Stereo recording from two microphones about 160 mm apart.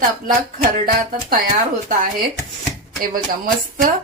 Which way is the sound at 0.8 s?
65° right (ahead or behind).